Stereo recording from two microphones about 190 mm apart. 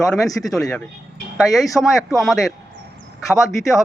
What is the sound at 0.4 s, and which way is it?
Speech, 5° left (ahead or behind).